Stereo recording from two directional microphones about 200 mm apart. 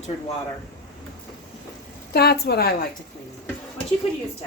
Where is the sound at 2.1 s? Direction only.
50° left (ahead or behind).